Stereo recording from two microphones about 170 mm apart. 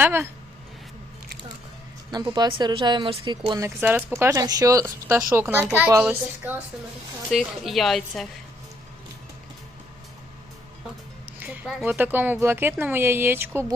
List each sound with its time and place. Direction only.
0.0 s speech: 15° right (ahead or behind)
2.0 s a woman's voice: 25° right (ahead or behind)
3.6 s a woman's voice: 10° right (ahead or behind)
11.3 s speech: 10° right (ahead or behind)